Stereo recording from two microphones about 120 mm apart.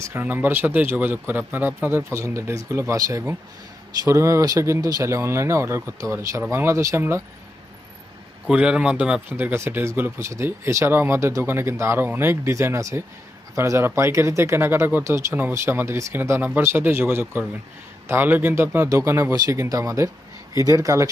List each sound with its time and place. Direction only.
0.0 s speech: 20° right (ahead or behind)
8.4 s speech: 5° right (ahead or behind); by 21.1 s 25° right (ahead or behind)